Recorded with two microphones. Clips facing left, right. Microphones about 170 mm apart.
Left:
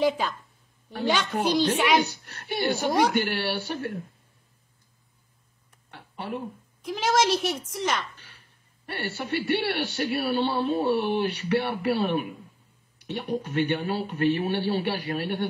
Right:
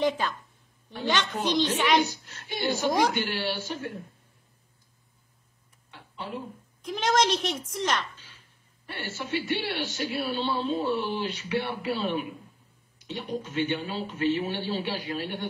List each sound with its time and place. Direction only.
1.0 s speech: 10° left (ahead or behind)
2.0 s a man's voice: 65° left (ahead or behind)
5.9 s a sound: 65° left (ahead or behind)
6.8 s a woman's voice: centre (ahead or behind)
8.2 s a sound: 70° left (ahead or behind)
9.6 s a man's voice: 65° left (ahead or behind)